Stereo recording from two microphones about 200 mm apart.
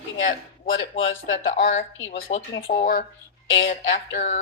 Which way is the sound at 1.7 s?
70° left (ahead or behind).